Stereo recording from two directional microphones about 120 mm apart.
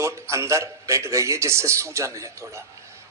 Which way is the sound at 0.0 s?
25° right (ahead or behind).